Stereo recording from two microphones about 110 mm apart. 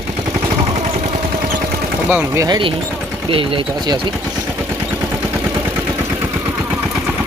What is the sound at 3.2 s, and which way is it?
Speech, 55° right (ahead or behind).